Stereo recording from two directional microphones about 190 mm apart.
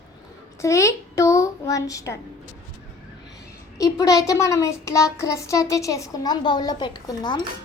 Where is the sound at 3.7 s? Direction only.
20° left (ahead or behind).